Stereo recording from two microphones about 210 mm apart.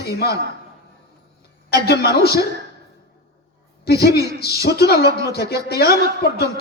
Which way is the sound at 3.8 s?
50° left (ahead or behind).